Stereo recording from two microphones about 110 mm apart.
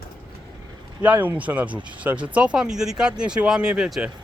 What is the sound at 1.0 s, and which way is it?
Speech, 15° right (ahead or behind).